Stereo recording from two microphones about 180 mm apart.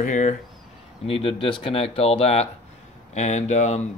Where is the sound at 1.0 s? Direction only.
30° left (ahead or behind).